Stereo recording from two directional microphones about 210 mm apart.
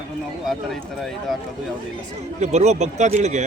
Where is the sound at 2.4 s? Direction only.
35° right (ahead or behind).